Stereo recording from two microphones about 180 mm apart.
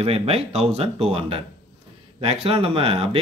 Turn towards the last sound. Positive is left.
turn(degrees=-35)  # may be behind; listen again after turning